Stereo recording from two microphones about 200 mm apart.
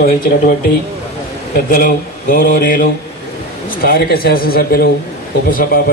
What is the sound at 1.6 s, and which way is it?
Speech, 45° left (ahead or behind).